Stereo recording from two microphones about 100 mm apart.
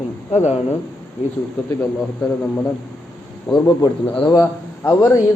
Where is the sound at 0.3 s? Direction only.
90° left.